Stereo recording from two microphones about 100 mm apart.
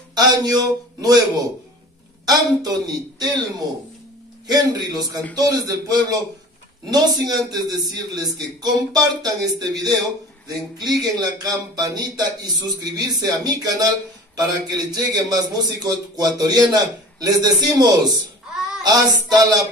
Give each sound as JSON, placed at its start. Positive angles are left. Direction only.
{"t": 0.1, "sound": "a man's voice", "side_deg": -40}
{"t": 18.8, "sound": "child singing", "side_deg": -40}